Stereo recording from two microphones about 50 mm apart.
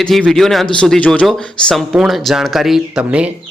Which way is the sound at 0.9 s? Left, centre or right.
Left.